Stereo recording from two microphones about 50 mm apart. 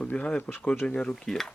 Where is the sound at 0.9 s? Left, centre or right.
Left.